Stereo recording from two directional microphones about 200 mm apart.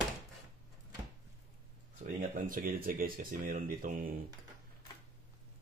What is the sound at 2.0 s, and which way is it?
Speech, 45° right (ahead or behind).